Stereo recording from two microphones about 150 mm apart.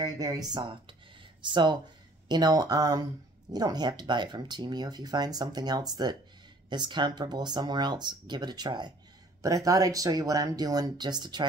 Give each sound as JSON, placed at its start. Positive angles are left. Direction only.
{"t": 0.0, "sound": "speech", "side_deg": -25}